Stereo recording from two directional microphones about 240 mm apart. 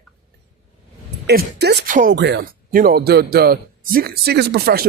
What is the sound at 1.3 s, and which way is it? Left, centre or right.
Speech, right.